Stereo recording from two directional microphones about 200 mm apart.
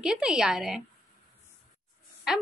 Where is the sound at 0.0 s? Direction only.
5° right (ahead or behind).